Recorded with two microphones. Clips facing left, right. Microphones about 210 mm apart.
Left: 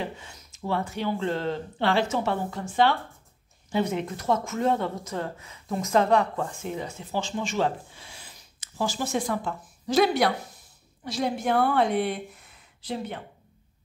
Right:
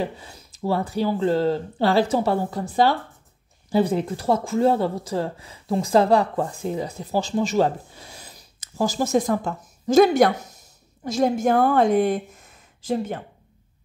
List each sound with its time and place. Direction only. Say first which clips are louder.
0.0 s speech: right 6 dB; 35° right (ahead or behind)